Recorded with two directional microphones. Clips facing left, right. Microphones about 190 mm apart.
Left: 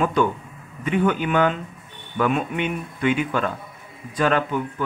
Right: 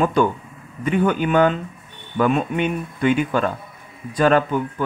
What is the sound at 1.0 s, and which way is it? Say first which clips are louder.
Speech: right 3 dB; 40° right (ahead or behind).